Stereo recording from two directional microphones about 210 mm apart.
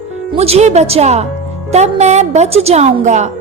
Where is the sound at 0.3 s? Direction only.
30° right (ahead or behind).